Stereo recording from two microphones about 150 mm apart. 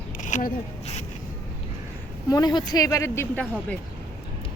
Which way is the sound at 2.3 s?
25° left (ahead or behind).